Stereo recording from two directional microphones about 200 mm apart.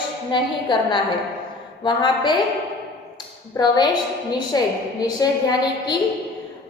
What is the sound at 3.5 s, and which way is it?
A woman's voice, 20° left (ahead or behind).